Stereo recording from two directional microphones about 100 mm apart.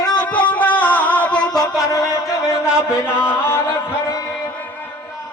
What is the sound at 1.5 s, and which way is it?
Music, 35° left (ahead or behind).